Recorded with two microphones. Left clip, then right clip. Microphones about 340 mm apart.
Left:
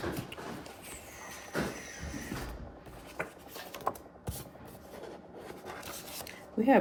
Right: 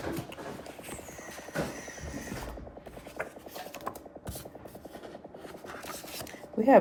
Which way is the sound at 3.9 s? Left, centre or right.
Centre.